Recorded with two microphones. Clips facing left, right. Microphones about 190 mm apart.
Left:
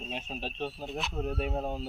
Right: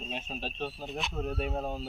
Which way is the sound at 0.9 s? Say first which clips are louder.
Left 1 dB; centre (ahead or behind).